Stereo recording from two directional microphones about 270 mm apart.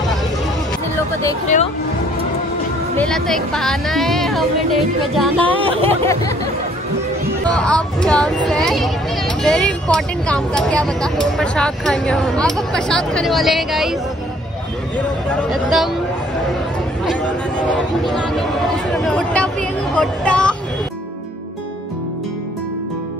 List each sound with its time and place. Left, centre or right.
3.0 s speech: centre
5.6 s speech: centre
5.9 s a sound: centre
7.5 s speech: centre
15.3 s speech: centre
18.9 s speech: centre